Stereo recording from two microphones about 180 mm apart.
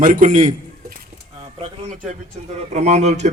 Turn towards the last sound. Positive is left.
turn(degrees=-40)  # may be behind; listen again after turning